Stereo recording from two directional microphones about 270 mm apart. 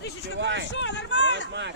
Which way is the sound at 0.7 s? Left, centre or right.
Left.